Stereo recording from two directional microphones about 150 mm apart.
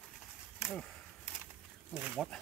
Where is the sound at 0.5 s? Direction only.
Centre (ahead or behind).